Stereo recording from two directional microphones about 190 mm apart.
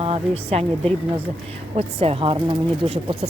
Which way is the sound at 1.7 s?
30° right (ahead or behind).